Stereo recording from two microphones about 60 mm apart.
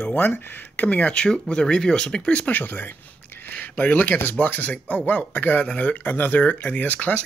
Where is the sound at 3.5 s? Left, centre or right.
Left.